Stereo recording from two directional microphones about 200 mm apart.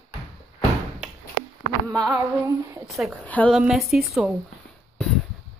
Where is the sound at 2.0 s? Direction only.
10° right (ahead or behind).